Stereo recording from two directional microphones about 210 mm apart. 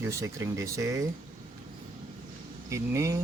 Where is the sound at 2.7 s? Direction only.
15° right (ahead or behind).